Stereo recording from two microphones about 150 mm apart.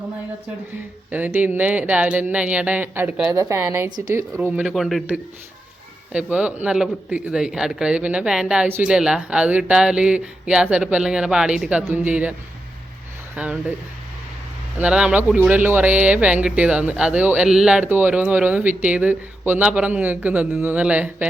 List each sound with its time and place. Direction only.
1.1 s a man's voice: 10° right (ahead or behind)
6.3 s speech: 10° right (ahead or behind)
13.3 s speech: 10° right (ahead or behind)
14.8 s speech: 5° right (ahead or behind)